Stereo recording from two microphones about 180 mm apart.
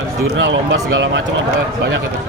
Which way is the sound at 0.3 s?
90° right.